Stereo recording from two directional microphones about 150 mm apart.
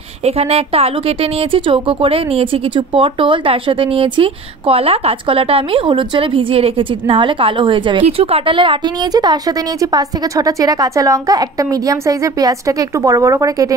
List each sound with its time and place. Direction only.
0.2 s a woman's voice: 40° right (ahead or behind); by 13.7 s 20° right (ahead or behind)